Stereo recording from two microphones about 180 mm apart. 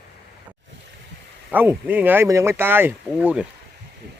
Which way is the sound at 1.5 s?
10° right (ahead or behind).